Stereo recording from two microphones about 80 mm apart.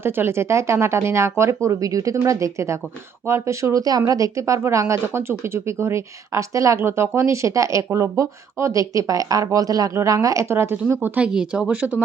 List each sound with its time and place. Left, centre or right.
0.0 s speech: right
9.9 s speech: right
11.2 s speech: centre